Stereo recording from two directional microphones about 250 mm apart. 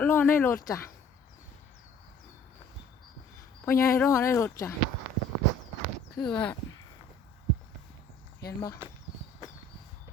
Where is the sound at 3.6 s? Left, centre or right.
Centre.